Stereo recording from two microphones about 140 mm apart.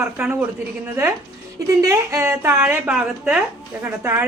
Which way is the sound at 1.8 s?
20° right (ahead or behind).